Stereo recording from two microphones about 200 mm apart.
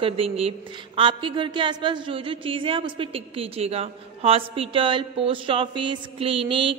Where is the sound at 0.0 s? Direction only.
30° right (ahead or behind).